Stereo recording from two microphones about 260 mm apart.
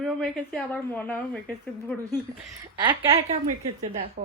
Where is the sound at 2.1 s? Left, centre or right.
Centre.